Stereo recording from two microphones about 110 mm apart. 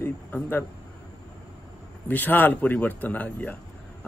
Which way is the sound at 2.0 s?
15° left (ahead or behind).